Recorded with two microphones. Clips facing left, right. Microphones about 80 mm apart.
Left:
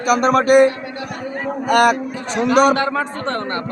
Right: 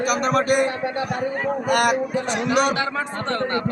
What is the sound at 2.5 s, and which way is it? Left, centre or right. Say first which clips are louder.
Speech: left 8 dB; left.